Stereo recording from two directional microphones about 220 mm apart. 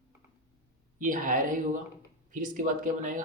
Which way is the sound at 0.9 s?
35° right (ahead or behind).